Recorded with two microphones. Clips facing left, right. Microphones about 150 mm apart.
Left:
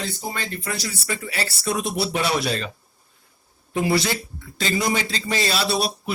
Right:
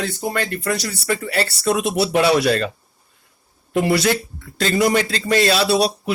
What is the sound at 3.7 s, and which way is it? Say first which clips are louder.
A man's voice: right 4 dB; 70° right (ahead or behind).